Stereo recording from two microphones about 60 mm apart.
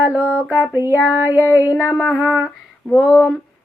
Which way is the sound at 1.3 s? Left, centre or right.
Left.